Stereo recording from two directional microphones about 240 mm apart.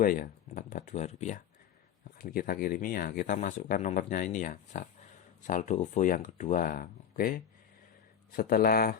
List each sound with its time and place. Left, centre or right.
0.0 s speech: left